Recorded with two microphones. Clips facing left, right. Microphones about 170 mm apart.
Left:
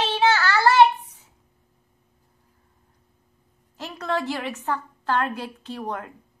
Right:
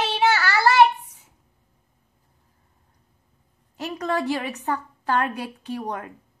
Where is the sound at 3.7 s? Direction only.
15° right (ahead or behind).